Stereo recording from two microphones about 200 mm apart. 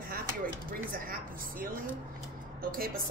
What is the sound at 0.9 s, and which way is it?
Speech, 45° right (ahead or behind).